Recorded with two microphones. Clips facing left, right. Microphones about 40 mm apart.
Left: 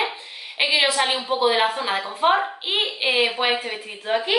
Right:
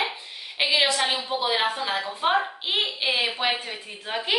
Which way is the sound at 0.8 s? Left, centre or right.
Centre.